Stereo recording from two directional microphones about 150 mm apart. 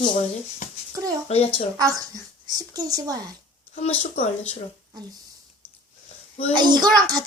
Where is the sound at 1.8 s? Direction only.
25° right (ahead or behind).